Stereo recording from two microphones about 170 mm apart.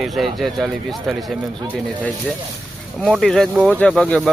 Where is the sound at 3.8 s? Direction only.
5° left (ahead or behind).